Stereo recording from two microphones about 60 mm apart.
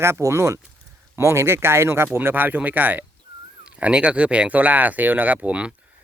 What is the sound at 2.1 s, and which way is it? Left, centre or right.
Speech, right.